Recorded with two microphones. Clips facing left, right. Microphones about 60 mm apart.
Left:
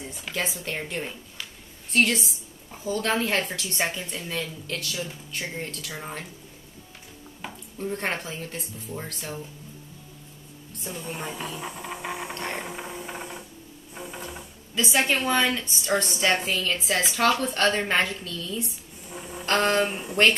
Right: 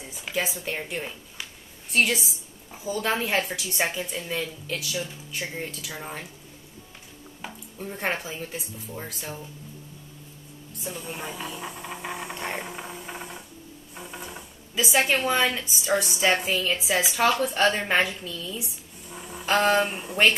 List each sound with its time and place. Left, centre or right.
0.1 s a woman's voice: centre
1.4 s a sound: centre
1.9 s a woman's voice: centre
7.4 s a woman's voice: centre
10.8 s a woman's voice: centre
12.4 s vehicle: centre
12.6 s a sound: centre
13.9 s a woman's voice: centre